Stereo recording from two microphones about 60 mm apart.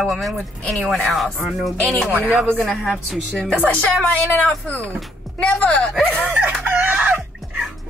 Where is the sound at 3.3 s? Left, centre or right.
Centre.